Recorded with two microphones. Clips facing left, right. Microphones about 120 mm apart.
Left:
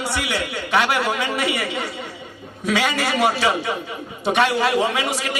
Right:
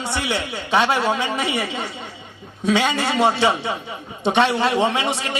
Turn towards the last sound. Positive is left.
turn(degrees=-25)  # may be behind; listen again after turning